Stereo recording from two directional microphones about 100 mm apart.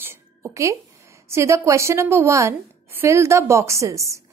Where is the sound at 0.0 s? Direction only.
25° right (ahead or behind).